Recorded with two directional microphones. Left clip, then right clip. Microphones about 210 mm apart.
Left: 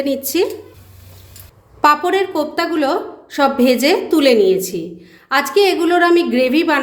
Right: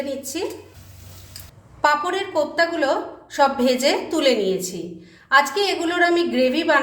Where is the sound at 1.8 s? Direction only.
35° left (ahead or behind).